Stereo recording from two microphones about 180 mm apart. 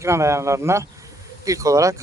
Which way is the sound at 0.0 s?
15° right (ahead or behind).